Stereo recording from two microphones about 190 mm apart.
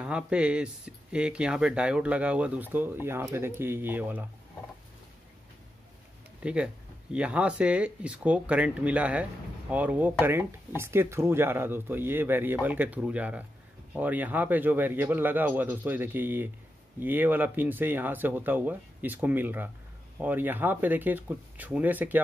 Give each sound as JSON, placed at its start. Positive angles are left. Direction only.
{"t": 0.0, "sound": "speech", "side_deg": -5}
{"t": 6.4, "sound": "speech", "side_deg": -5}